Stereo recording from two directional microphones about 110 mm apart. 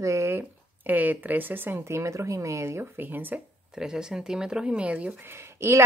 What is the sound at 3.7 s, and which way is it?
Speech, 5° right (ahead or behind).